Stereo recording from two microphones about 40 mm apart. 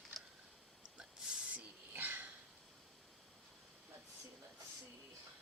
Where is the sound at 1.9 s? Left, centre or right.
Right.